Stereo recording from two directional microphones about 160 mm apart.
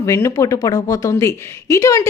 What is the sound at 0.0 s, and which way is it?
A woman's voice, 20° left (ahead or behind).